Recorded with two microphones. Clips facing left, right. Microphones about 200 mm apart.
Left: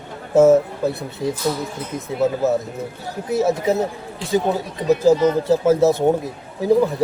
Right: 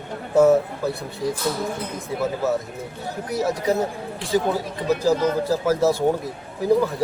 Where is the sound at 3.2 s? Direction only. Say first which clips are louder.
Left 4 dB; 25° left (ahead or behind).